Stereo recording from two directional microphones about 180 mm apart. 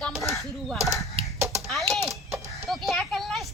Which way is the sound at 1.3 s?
15° right (ahead or behind).